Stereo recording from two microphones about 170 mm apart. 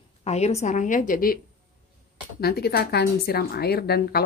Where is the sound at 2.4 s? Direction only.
70° left (ahead or behind).